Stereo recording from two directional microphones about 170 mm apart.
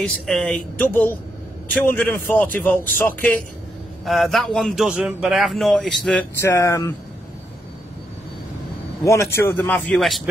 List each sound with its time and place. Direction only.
0.0 s a man's voice: 5° left (ahead or behind)
6.4 s a man's voice: 15° left (ahead or behind)
9.0 s a man's voice: 15° left (ahead or behind)
9.9 s a man's voice: centre (ahead or behind)